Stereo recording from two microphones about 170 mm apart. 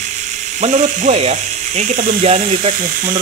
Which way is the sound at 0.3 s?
45° right (ahead or behind).